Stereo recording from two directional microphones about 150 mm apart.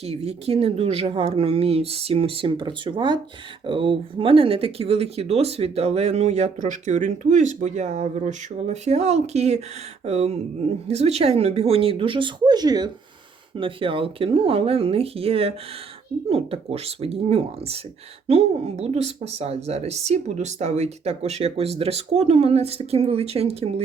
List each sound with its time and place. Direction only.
0.0 s speech: 45° right (ahead or behind)